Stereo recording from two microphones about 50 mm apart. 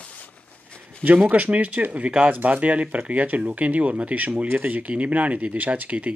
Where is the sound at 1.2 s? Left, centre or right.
Right.